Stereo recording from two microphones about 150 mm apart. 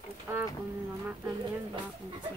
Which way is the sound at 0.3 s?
15° right (ahead or behind).